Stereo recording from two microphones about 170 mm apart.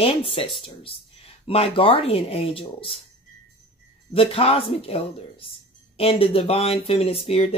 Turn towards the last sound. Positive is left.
turn(degrees=35)  # may be behind; listen again after turning